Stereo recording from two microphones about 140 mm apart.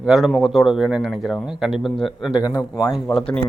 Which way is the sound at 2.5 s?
25° left (ahead or behind).